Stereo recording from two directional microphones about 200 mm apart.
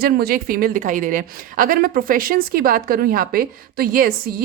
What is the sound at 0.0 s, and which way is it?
A woman's voice, 50° right (ahead or behind).